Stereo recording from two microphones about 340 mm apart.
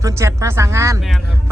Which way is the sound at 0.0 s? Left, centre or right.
Centre.